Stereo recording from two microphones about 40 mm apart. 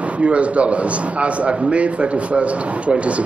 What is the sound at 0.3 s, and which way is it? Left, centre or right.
A man's voice, right.